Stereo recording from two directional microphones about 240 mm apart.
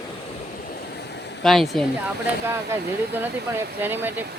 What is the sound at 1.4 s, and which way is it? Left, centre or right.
Speech, centre.